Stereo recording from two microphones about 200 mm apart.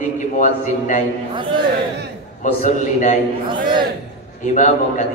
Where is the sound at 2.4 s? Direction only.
40° left (ahead or behind).